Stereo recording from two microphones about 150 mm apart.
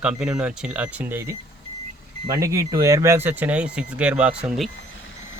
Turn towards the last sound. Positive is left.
turn(degrees=-5)  # may be behind; listen again after turning